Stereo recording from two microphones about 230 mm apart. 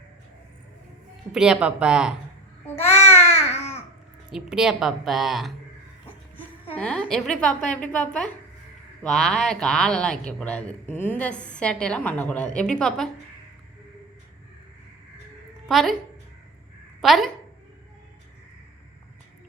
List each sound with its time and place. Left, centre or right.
1.3 s speech: centre
2.6 s babbling: centre
3.2 s babbling: left
4.3 s speech: centre
6.7 s speech: centre
9.0 s speech: centre
15.7 s speech: centre
17.0 s a woman's voice: centre